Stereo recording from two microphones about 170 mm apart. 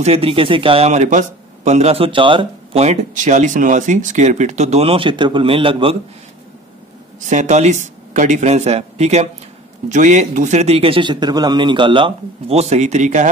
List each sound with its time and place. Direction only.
0.0 s speech: 35° right (ahead or behind)
7.2 s speech: 45° right (ahead or behind)